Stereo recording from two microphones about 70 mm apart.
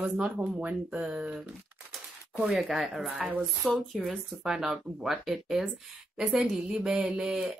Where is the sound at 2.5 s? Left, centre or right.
Centre.